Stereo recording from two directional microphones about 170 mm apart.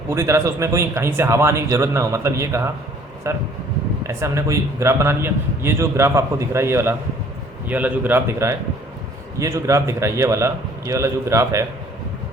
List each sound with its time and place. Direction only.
0.1 s a man's voice: 15° right (ahead or behind)